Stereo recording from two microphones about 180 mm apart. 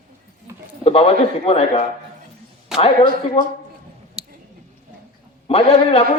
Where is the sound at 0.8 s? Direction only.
30° left (ahead or behind).